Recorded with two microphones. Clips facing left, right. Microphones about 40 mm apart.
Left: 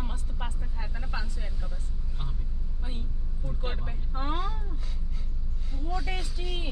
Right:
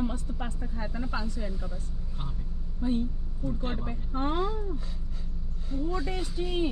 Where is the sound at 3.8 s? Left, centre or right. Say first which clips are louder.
Right 5 dB; centre.